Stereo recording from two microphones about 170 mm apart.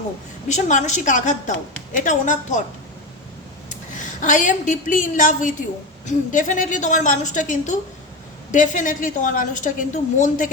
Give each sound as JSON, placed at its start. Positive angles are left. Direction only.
{"t": 0.4, "sound": "a woman's voice", "side_deg": 45}
{"t": 3.9, "sound": "a woman's voice", "side_deg": 45}